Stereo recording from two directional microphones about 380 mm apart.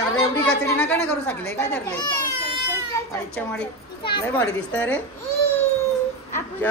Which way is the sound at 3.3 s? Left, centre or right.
Centre.